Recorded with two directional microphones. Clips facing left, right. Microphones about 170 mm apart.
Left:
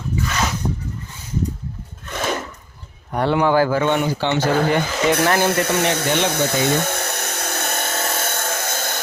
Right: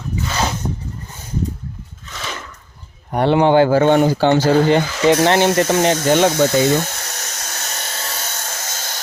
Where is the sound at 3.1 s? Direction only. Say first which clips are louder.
Right 4 dB; 25° right (ahead or behind); by 4.4 s 40° right (ahead or behind).